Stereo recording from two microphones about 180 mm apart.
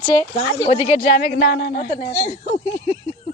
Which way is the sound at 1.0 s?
55° left (ahead or behind).